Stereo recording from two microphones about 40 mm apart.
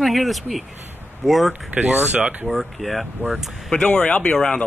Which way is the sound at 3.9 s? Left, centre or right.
Left.